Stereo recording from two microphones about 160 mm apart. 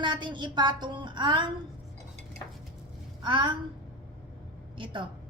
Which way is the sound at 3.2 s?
30° right (ahead or behind).